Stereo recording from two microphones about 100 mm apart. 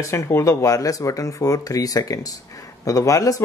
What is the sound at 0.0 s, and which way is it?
Speech, 30° left (ahead or behind).